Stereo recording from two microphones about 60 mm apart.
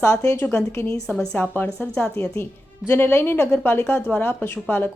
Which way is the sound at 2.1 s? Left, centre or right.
Left.